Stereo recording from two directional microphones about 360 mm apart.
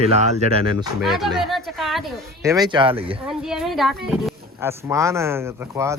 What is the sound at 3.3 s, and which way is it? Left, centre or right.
Speech, centre.